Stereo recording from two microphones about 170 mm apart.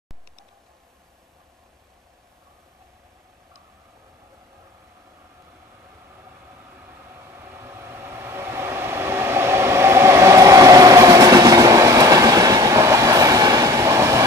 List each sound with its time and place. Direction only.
6.8 s vehicle: 15° right (ahead or behind)